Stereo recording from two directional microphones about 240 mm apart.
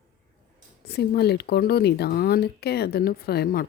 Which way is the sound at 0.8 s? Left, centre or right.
Left.